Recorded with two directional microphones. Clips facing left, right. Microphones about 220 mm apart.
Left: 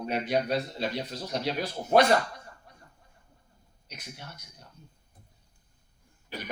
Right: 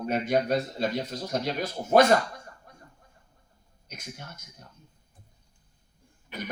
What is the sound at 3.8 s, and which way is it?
Speech, 45° right (ahead or behind).